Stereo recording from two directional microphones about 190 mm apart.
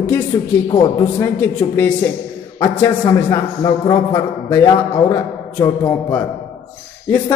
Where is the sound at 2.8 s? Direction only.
15° left (ahead or behind).